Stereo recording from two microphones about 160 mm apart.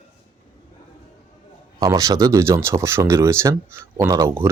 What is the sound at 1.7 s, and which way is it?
Speech, 20° right (ahead or behind).